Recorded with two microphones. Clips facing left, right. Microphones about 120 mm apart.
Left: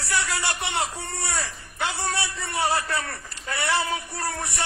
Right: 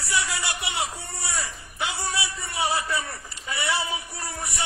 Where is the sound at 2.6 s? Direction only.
60° left (ahead or behind).